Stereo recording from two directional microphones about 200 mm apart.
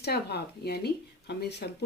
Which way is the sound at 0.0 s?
55° left (ahead or behind).